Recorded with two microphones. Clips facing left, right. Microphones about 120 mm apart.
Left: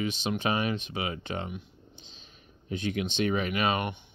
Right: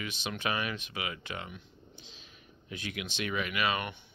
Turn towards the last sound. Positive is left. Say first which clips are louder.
# left 4 dB
turn(degrees=30)  # may be behind; listen again after turning